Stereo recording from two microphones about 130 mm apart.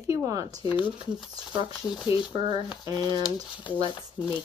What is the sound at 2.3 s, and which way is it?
Speech, 40° right (ahead or behind).